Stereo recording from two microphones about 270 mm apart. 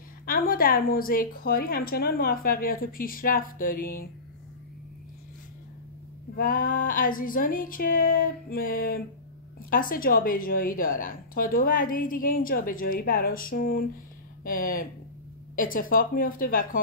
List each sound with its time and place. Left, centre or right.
0.3 s a woman's voice: left
6.3 s a woman's voice: left